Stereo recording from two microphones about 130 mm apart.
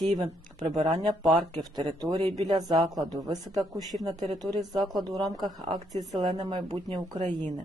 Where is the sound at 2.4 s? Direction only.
30° right (ahead or behind).